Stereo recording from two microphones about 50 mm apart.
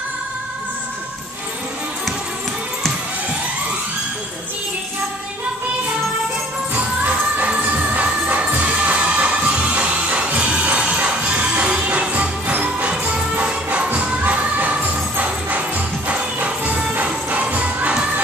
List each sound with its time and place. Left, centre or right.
6.7 s music: right